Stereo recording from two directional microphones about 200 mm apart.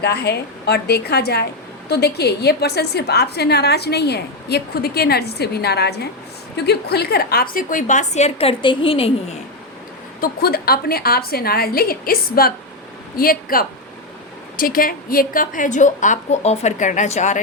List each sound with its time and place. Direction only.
0.0 s a woman's voice: 55° left (ahead or behind); by 9.1 s 25° left (ahead or behind)
10.2 s a woman's voice: 50° left (ahead or behind)